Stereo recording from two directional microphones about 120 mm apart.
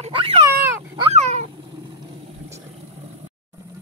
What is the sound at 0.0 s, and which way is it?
Cat, 50° right (ahead or behind).